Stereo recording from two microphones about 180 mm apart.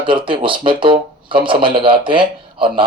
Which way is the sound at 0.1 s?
30° right (ahead or behind).